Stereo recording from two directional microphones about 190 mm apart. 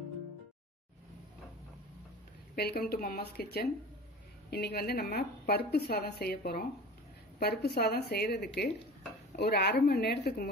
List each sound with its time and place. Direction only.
2.5 s a woman's voice: 55° left (ahead or behind)